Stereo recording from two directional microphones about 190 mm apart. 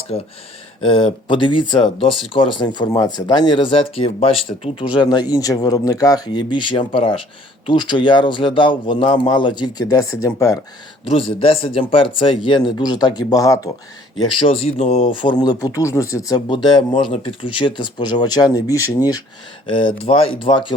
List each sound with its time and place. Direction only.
0.1 s speech: 35° left (ahead or behind); by 10.6 s 15° left (ahead or behind)
11.1 s speech: 30° left (ahead or behind)